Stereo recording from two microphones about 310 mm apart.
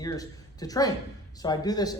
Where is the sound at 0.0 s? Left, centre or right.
Centre.